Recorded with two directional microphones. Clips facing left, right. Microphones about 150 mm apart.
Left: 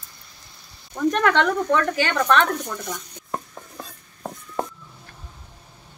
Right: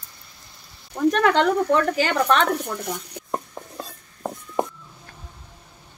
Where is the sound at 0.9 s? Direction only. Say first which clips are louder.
Right 1 dB; 10° right (ahead or behind).